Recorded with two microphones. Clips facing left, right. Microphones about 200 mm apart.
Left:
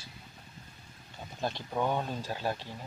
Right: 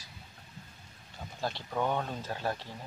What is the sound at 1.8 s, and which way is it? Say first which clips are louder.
Speech: left 1 dB; 5° left (ahead or behind).